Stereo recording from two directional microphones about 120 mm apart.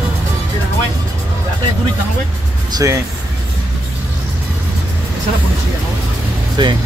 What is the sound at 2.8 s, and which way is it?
Music, 25° right (ahead or behind).